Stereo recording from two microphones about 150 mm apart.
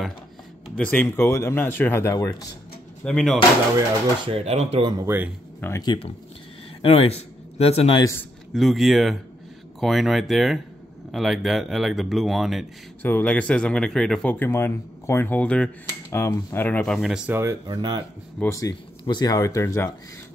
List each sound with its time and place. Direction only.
0.7 s speech: 10° left (ahead or behind)
3.0 s speech: 5° left (ahead or behind)
4.2 s speech: 40° right (ahead or behind)
4.9 s speech: 15° right (ahead or behind)
5.6 s speech: 20° left (ahead or behind)
6.8 s speech: 40° left (ahead or behind)
8.0 s speech: 15° left (ahead or behind)
8.5 s speech: centre (ahead or behind)
13.0 s speech: 10° left (ahead or behind)
17.3 s speech: 20° right (ahead or behind)
18.4 s speech: 20° left (ahead or behind)